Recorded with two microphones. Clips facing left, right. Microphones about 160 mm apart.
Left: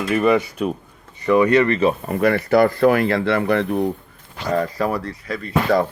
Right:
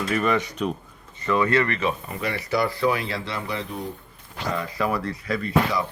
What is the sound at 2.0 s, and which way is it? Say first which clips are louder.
Speech: left 10 dB; 55° left (ahead or behind).